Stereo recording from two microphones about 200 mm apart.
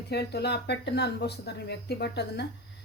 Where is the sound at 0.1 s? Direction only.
55° left (ahead or behind).